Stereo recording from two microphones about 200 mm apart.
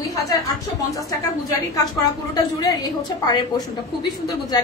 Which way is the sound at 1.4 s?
20° left (ahead or behind).